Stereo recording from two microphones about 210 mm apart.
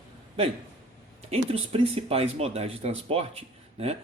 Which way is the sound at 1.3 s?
30° right (ahead or behind).